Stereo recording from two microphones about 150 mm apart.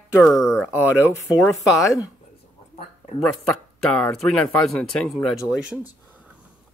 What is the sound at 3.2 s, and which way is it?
A man's voice, 5° left (ahead or behind).